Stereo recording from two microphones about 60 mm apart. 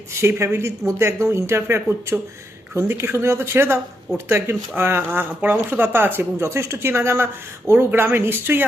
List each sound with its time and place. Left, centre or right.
0.1 s speech: right
1.9 s speech: right
2.7 s speech: right